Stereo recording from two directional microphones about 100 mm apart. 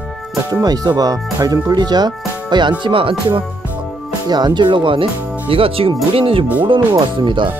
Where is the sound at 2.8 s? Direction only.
60° right (ahead or behind).